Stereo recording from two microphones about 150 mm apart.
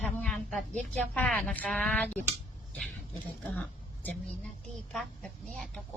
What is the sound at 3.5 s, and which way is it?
A woman's voice, 10° left (ahead or behind).